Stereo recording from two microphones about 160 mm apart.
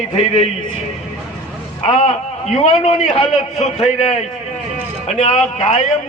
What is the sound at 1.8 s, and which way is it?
A man's voice, 40° left (ahead or behind).